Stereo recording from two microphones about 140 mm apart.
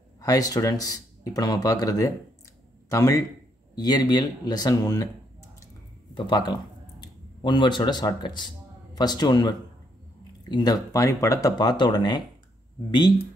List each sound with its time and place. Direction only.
0.2 s speech: 25° left (ahead or behind)